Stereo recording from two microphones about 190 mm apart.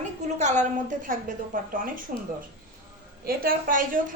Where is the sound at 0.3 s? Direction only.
40° right (ahead or behind).